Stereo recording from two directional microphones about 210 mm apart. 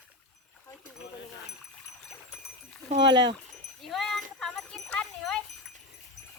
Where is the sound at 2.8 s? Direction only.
20° right (ahead or behind).